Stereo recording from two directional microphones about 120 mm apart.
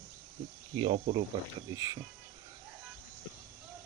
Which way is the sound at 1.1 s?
45° right (ahead or behind).